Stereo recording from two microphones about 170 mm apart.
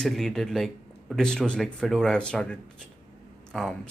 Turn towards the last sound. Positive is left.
turn(degrees=5)  # may be behind; listen again after turning